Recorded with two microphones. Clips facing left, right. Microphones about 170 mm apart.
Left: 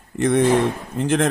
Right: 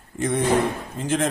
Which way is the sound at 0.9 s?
60° left (ahead or behind).